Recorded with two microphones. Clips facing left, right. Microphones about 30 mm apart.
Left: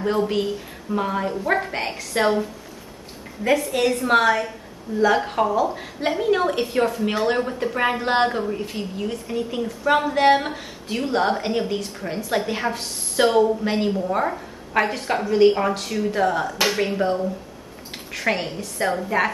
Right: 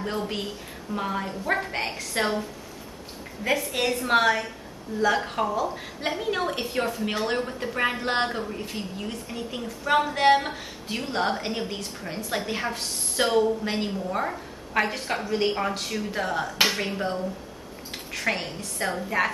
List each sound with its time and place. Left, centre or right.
0.0 s speech: centre
3.4 s a woman's voice: centre
5.8 s a woman's voice: centre